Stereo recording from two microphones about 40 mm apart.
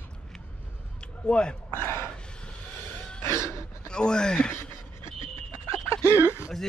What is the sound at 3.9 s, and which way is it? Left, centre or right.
Speech, left.